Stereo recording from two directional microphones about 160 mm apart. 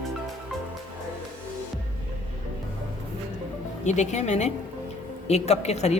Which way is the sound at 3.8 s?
45° left (ahead or behind).